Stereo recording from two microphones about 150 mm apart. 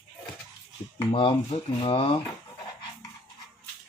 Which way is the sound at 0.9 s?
35° left (ahead or behind).